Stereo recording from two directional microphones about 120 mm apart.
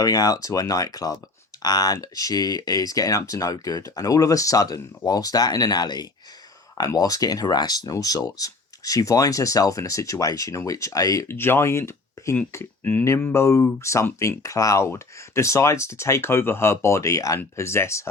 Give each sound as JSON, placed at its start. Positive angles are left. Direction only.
{"t": 0.0, "sound": "speech", "side_deg": 30}